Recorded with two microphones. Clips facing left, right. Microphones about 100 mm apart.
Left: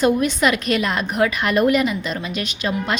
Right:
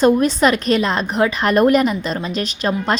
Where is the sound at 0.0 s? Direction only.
35° right (ahead or behind).